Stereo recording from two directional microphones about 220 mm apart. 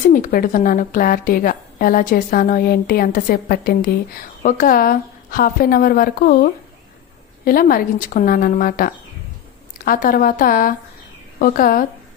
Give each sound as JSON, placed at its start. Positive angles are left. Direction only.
{"t": 0.1, "sound": "a woman's voice", "side_deg": 40}